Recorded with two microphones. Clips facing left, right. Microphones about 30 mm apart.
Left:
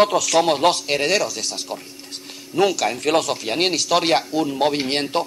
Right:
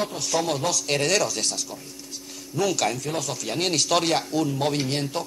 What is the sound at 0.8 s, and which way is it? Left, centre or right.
Speech, centre.